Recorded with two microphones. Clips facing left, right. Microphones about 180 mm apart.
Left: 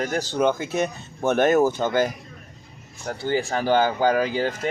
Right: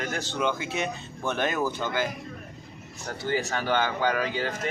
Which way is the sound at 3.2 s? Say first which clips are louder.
Left 4 dB; 30° left (ahead or behind).